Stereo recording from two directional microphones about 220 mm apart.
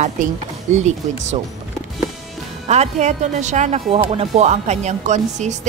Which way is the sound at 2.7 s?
30° right (ahead or behind).